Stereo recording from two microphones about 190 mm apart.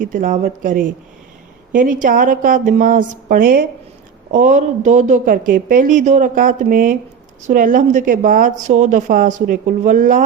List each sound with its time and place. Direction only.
0.0 s speech: 45° right (ahead or behind)